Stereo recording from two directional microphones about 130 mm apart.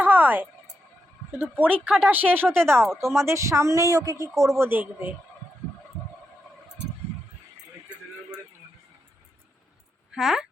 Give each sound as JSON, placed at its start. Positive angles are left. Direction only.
{"t": 0.0, "sound": "a sound", "side_deg": -15}
{"t": 1.3, "sound": "speech", "side_deg": -15}
{"t": 2.9, "sound": "speech", "side_deg": 0}
{"t": 3.2, "sound": "a man's voice", "side_deg": -20}
{"t": 10.1, "sound": "speech", "side_deg": -5}